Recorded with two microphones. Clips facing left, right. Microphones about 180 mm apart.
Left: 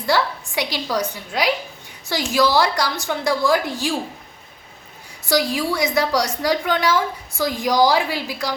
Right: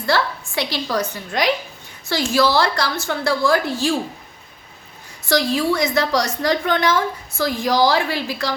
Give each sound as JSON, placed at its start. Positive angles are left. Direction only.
{"t": 0.0, "sound": "a woman's voice", "side_deg": 15}
{"t": 5.3, "sound": "a woman's voice", "side_deg": 15}